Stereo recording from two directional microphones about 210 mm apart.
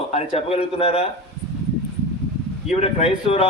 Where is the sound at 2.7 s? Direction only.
30° left (ahead or behind).